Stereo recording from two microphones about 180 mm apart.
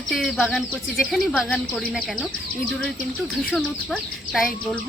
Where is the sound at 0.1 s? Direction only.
Centre (ahead or behind).